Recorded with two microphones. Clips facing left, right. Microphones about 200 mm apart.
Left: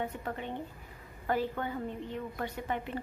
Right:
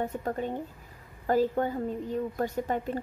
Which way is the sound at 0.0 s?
40° right (ahead or behind).